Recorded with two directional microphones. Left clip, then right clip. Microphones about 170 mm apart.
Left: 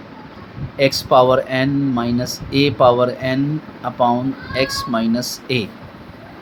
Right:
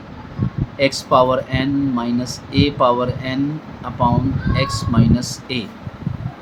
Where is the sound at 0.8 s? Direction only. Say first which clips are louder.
Left 2 dB; 40° left (ahead or behind).